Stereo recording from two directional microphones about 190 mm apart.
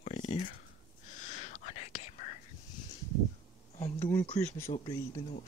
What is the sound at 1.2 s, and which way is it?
Whispering, 40° left (ahead or behind).